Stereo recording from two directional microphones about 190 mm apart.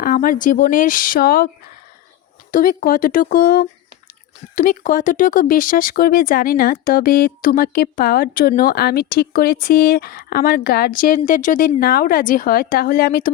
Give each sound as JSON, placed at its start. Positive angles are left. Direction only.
{"t": 0.0, "sound": "speech", "side_deg": 50}
{"t": 2.5, "sound": "speech", "side_deg": 50}